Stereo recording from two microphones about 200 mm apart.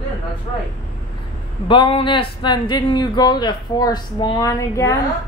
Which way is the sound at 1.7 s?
25° left (ahead or behind).